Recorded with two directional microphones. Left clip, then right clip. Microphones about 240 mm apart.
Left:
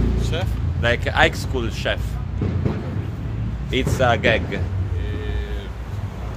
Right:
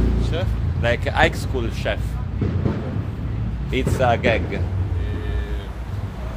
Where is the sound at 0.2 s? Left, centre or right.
Left.